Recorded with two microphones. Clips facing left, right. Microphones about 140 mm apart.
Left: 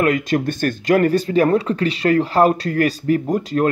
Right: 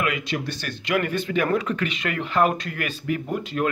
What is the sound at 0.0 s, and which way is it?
Speech, 45° left (ahead or behind).